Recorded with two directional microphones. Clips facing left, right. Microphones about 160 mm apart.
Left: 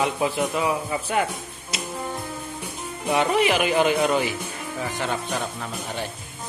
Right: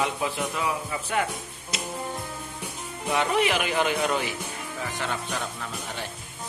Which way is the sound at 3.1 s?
10° left (ahead or behind).